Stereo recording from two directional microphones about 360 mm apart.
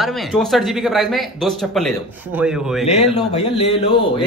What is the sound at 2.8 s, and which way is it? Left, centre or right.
Speech, centre.